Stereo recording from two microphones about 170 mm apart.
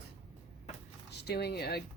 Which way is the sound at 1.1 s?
75° left (ahead or behind).